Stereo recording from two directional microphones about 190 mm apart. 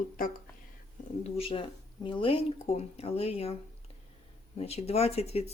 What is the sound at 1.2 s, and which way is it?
Speech, 30° left (ahead or behind).